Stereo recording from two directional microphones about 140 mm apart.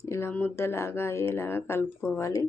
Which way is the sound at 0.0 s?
20° left (ahead or behind).